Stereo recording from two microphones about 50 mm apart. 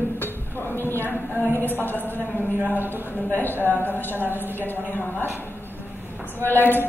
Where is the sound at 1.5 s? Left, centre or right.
Right.